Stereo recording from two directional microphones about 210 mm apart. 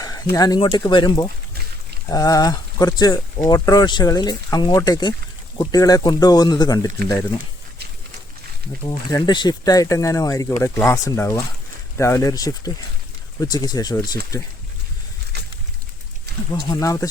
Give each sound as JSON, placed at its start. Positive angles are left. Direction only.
{"t": 0.0, "sound": "speech", "side_deg": 15}
{"t": 8.9, "sound": "speech", "side_deg": 20}
{"t": 15.3, "sound": "a sound", "side_deg": -50}
{"t": 16.6, "sound": "speech", "side_deg": 15}